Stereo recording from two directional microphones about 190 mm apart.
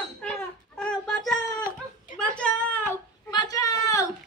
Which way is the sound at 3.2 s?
20° left (ahead or behind).